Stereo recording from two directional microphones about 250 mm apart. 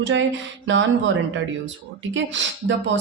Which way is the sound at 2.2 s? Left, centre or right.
Right.